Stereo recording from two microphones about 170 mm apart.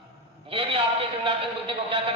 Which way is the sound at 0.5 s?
30° right (ahead or behind).